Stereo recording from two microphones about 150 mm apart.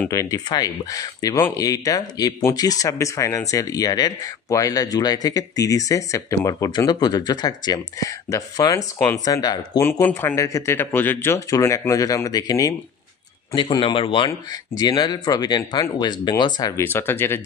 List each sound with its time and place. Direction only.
0.1 s speech: 20° left (ahead or behind)